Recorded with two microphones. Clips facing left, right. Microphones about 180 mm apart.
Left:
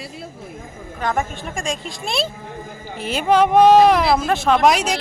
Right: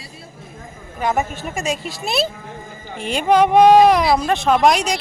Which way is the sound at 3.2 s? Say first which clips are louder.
Right 1 dB; 10° right (ahead or behind).